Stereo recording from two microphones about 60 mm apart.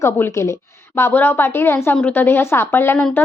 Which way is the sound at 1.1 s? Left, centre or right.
Left.